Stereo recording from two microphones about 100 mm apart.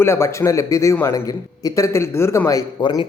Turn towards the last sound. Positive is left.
turn(degrees=45)  # may be behind; listen again after turning